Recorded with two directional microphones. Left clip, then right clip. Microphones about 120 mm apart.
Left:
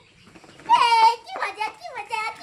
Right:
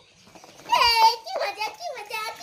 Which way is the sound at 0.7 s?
15° left (ahead or behind).